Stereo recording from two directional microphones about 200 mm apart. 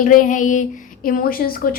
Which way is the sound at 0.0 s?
40° left (ahead or behind).